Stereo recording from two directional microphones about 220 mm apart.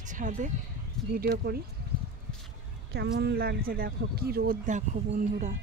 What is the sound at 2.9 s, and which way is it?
Speech, 50° right (ahead or behind).